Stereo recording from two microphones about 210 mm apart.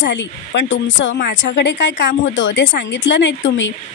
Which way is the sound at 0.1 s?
60° left (ahead or behind).